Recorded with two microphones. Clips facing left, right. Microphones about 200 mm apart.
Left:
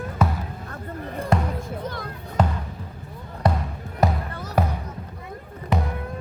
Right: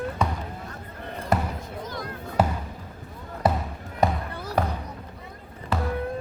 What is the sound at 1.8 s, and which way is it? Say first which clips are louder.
Basketball bounce: left 2 dB; 60° left (ahead or behind).